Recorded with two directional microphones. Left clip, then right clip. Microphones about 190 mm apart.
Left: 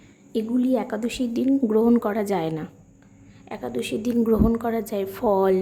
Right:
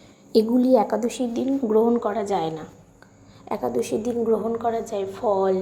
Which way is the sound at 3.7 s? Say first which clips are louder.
Even; 10° left (ahead or behind).